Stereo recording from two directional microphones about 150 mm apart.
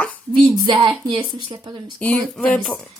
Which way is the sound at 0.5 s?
25° right (ahead or behind).